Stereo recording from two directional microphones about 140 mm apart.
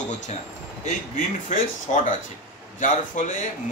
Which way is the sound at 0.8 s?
60° left (ahead or behind).